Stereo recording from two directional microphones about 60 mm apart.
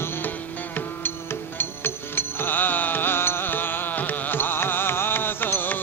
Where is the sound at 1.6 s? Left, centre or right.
Left.